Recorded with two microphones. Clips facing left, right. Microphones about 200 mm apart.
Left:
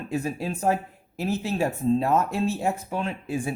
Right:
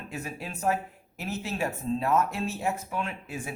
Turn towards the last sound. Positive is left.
turn(degrees=30)  # may be behind; listen again after turning